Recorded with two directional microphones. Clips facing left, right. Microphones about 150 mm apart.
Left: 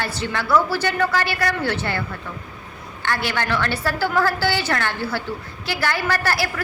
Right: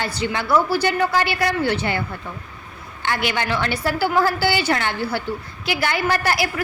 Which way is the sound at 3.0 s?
15° right (ahead or behind).